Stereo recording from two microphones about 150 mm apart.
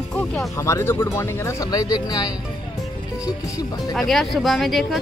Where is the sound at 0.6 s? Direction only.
20° left (ahead or behind).